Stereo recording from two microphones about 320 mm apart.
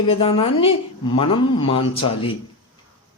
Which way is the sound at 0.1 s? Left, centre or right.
Centre.